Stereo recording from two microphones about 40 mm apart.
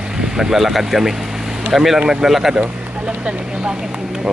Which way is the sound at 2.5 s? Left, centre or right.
Right.